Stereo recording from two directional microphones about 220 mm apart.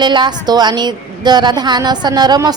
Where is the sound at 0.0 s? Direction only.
20° right (ahead or behind).